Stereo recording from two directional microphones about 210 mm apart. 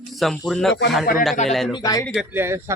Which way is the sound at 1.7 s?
15° left (ahead or behind).